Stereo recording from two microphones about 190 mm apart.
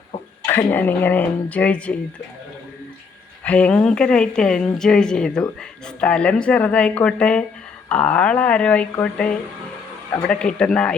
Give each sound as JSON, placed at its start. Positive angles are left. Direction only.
{"t": 0.4, "sound": "speech", "side_deg": 10}
{"t": 3.4, "sound": "a woman's voice", "side_deg": 5}